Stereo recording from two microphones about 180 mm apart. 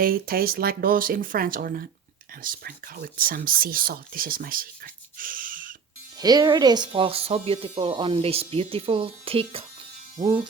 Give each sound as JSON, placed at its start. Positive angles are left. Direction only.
{"t": 0.0, "sound": "speech", "side_deg": -55}
{"t": 6.1, "sound": "speech", "side_deg": -20}